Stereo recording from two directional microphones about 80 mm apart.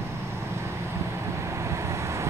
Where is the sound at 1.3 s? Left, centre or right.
Right.